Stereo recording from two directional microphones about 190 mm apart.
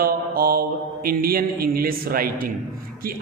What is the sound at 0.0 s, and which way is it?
Mantra, 50° right (ahead or behind).